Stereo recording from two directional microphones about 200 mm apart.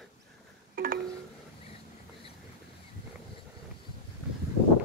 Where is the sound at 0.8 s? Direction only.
45° right (ahead or behind).